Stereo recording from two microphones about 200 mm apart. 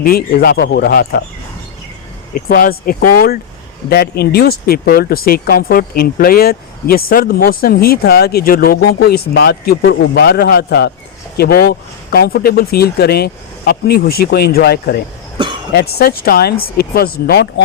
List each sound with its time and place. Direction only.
0.0 s speech: 50° left (ahead or behind)
2.3 s speech: 45° left (ahead or behind)
15.4 s cough: 25° right (ahead or behind)
15.7 s speech: 50° left (ahead or behind)